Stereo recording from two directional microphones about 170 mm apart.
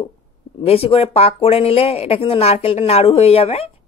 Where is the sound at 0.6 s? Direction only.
35° left (ahead or behind).